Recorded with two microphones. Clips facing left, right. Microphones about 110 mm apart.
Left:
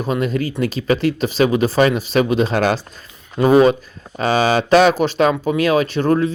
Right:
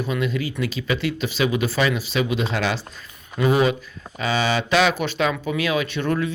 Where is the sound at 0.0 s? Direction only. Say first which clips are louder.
Left 5 dB; 40° left (ahead or behind).